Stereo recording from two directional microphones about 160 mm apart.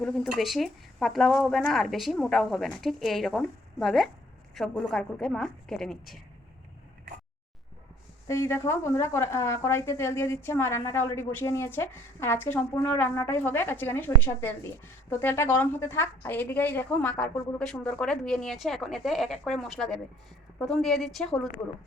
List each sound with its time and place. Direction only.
0.0 s speech: centre (ahead or behind)
8.3 s a woman's voice: 15° left (ahead or behind)